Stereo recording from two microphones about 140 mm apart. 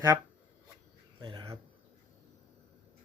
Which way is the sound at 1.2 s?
35° right (ahead or behind).